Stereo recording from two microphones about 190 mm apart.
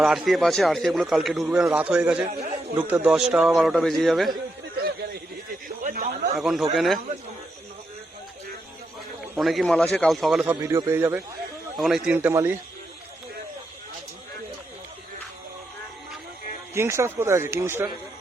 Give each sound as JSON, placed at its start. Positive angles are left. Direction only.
{"t": 0.0, "sound": "a man's voice", "side_deg": 0}
{"t": 5.6, "sound": "a sound", "side_deg": -45}
{"t": 6.3, "sound": "a man's voice", "side_deg": 0}
{"t": 9.3, "sound": "a man's voice", "side_deg": 0}
{"t": 11.8, "sound": "speech", "side_deg": 0}
{"t": 16.7, "sound": "speech", "side_deg": -15}